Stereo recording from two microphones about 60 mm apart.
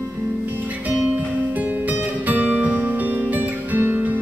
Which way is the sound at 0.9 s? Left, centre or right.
Right.